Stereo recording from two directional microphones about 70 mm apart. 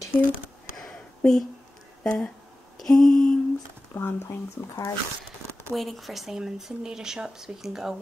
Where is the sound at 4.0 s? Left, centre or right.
Left.